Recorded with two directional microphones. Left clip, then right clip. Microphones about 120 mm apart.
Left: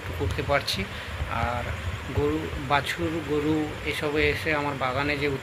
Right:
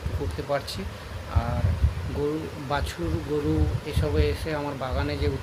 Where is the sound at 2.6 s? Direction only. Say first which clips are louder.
Left 5 dB; 20° right (ahead or behind).